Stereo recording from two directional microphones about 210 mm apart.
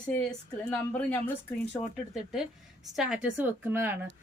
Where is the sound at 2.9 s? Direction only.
5° right (ahead or behind).